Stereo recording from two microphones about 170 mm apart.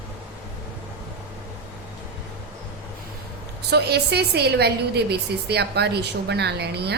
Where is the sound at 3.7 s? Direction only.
75° right (ahead or behind).